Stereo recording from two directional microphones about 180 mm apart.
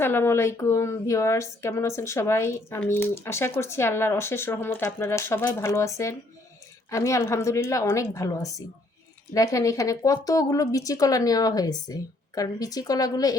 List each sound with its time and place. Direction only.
0.0 s a woman's voice: 15° left (ahead or behind)